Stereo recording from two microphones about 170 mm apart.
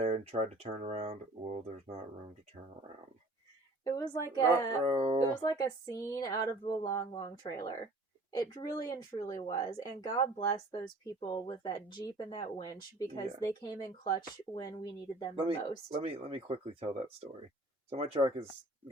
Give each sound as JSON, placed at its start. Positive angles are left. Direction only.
{"t": 0.0, "sound": "speech", "side_deg": -40}
{"t": 3.8, "sound": "speech", "side_deg": 20}
{"t": 4.9, "sound": "speech", "side_deg": -35}
{"t": 5.4, "sound": "speech", "side_deg": 20}
{"t": 15.9, "sound": "speech", "side_deg": -35}